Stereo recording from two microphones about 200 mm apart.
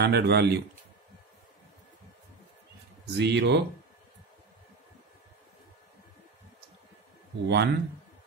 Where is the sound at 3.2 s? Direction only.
60° right (ahead or behind).